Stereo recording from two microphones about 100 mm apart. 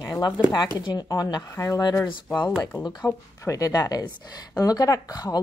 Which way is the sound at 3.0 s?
30° left (ahead or behind).